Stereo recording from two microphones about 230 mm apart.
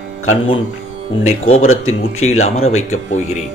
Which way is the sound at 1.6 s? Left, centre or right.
Left.